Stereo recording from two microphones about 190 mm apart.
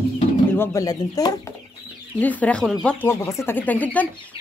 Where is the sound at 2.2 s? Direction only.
10° left (ahead or behind).